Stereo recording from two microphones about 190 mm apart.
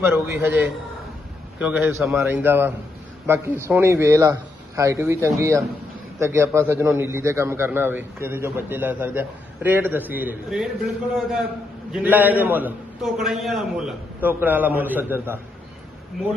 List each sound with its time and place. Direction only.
0.0 s a man's voice: 10° right (ahead or behind)